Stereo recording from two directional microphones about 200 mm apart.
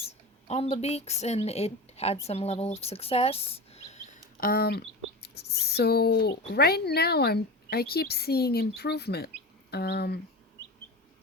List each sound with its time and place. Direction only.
0.4 s a woman's voice: 30° left (ahead or behind); by 10.2 s 55° left (ahead or behind)